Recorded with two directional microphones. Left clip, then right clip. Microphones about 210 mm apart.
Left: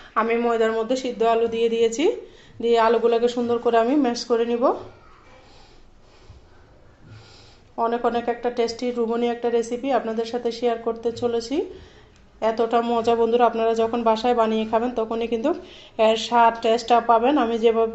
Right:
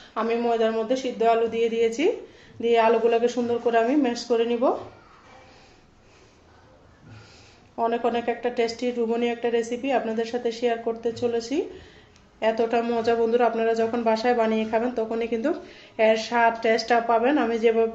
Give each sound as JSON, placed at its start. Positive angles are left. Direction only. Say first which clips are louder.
{"t": 0.1, "sound": "speech", "louder": "left 3 dB", "side_deg": 15}
{"t": 7.8, "sound": "a woman's voice", "louder": "left 2 dB", "side_deg": 15}